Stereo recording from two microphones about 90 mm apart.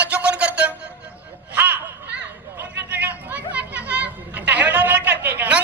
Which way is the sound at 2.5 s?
20° right (ahead or behind).